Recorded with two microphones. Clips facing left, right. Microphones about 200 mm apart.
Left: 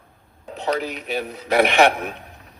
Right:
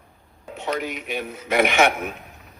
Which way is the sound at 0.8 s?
35° left (ahead or behind).